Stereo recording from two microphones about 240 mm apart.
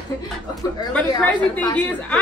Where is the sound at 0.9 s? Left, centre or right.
Centre.